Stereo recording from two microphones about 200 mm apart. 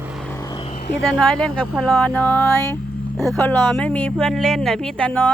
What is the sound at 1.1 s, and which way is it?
Speech, 5° left (ahead or behind).